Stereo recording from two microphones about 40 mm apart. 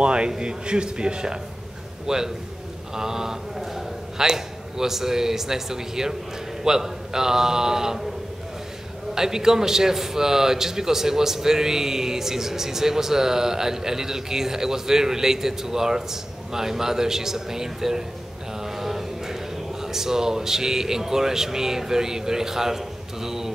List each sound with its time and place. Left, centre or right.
0.0 s a man's voice: right
9.1 s a man's voice: centre
18.6 s mantra: centre
19.8 s a man's voice: centre